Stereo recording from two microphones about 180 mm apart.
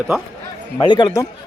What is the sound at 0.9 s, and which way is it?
Speech, 25° left (ahead or behind).